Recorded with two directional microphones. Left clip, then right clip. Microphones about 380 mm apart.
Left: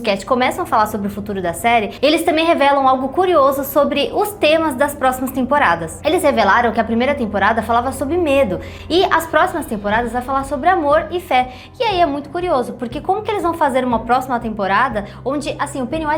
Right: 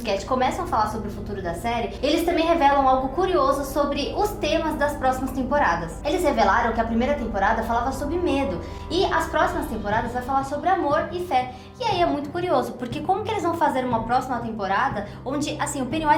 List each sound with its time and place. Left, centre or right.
0.0 s a woman's voice: left
11.9 s a woman's voice: left
15.3 s a woman's voice: left